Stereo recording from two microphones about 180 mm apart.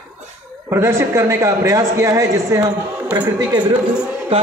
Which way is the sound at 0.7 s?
15° right (ahead or behind).